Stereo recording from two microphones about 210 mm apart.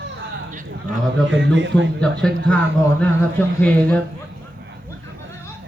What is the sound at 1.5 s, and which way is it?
Speech, 60° right (ahead or behind).